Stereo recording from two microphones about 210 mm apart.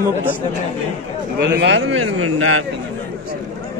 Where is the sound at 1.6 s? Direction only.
60° right (ahead or behind); by 2.6 s 85° right.